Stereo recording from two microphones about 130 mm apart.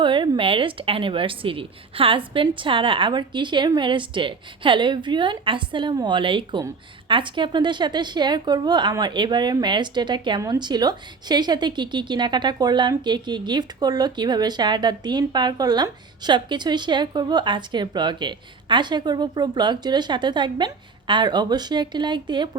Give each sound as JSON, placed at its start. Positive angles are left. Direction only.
{"t": 0.0, "sound": "a woman's voice", "side_deg": -40}